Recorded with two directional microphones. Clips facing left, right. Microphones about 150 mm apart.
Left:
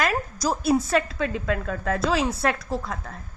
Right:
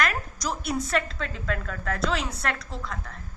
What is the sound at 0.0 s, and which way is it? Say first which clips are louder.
A woman's voice: left 4 dB; 30° left (ahead or behind).